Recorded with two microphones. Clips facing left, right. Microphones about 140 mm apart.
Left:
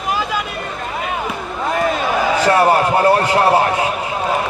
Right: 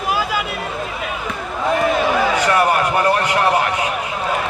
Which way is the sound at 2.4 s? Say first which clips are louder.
Left 3 dB; 30° left (ahead or behind).